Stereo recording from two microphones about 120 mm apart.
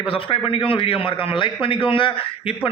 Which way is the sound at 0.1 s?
50° left (ahead or behind).